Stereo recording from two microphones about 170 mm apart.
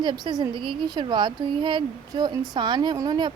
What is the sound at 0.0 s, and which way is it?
A woman's voice, 25° right (ahead or behind).